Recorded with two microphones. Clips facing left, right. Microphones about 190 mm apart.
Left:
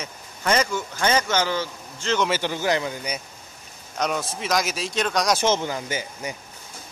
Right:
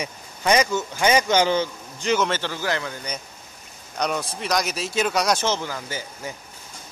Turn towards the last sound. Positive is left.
turn(degrees=15)  # may be behind; listen again after turning